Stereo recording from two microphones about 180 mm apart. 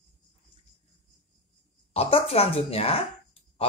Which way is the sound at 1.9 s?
35° left (ahead or behind).